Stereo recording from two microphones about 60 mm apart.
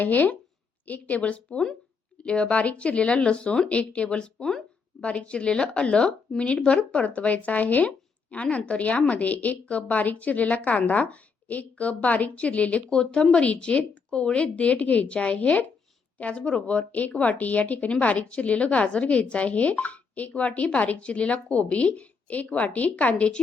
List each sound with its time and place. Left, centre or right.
0.0 s speech: left